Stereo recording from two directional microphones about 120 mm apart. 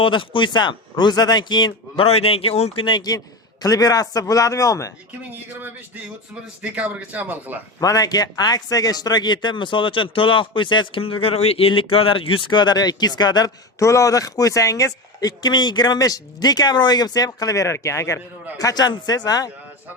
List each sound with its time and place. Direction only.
0.0 s a man's voice: 45° left (ahead or behind)
2.0 s a man's voice: 55° left (ahead or behind); by 4.9 s 25° left (ahead or behind)
5.3 s speech: 15° right (ahead or behind)
7.8 s a man's voice: 30° left (ahead or behind)